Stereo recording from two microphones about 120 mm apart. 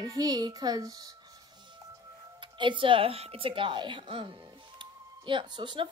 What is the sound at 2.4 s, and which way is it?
Speech, 40° right (ahead or behind).